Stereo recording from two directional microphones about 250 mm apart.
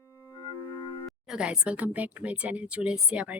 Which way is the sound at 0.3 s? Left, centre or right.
Centre.